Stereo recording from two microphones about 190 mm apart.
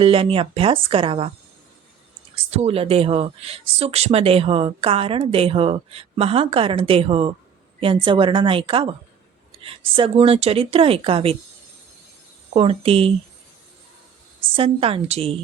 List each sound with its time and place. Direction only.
0.0 s speech: 30° right (ahead or behind)
2.5 s speech: 35° right (ahead or behind)
12.5 s speech: 30° right (ahead or behind)
14.5 s speech: 30° right (ahead or behind)